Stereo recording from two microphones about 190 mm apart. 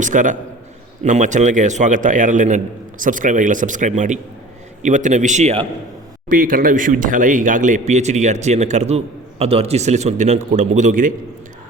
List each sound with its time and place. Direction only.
0.0 s a man's voice: 40° right (ahead or behind)
6.2 s speech: 45° right (ahead or behind)